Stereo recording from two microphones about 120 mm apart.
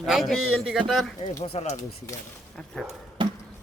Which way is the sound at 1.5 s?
60° left (ahead or behind).